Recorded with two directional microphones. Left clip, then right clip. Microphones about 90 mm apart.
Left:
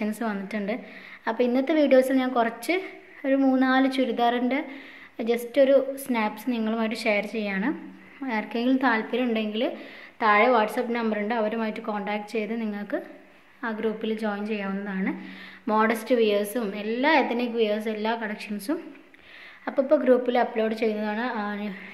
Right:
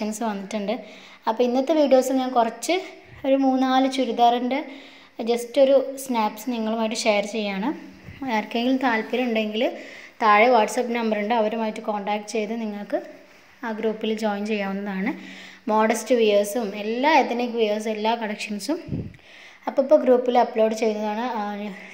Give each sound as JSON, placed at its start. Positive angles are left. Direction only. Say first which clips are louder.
{"t": 0.0, "sound": "a woman's voice", "louder": "right 2 dB", "side_deg": -15}
{"t": 2.7, "sound": "a woman's voice", "louder": "right 3 dB", "side_deg": -25}
{"t": 3.3, "sound": "a woman's voice", "louder": "right 1 dB", "side_deg": -10}
{"t": 8.2, "sound": "a woman's voice", "louder": "right 4 dB", "side_deg": -35}
{"t": 8.6, "sound": "a woman's voice", "louder": "left 2 dB", "side_deg": -20}
{"t": 11.5, "sound": "a woman's voice", "louder": "right 3 dB", "side_deg": -15}
{"t": 14.0, "sound": "a woman's voice", "louder": "right 4 dB", "side_deg": -40}
{"t": 15.6, "sound": "a woman's voice", "louder": "right 3 dB", "side_deg": -25}
{"t": 19.6, "sound": "a woman's voice", "louder": "right 4 dB", "side_deg": -25}